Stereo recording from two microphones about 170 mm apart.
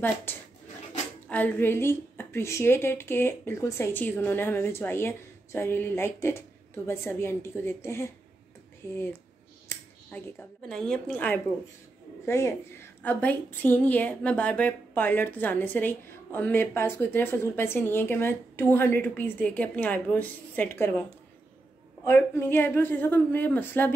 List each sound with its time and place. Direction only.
0.0 s a woman's voice: 10° left (ahead or behind)
10.1 s a woman's voice: 10° left (ahead or behind)
22.0 s a woman's voice: 15° left (ahead or behind)